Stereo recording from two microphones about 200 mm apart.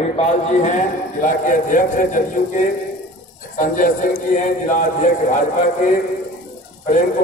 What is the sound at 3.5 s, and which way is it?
A man's voice, 40° left (ahead or behind).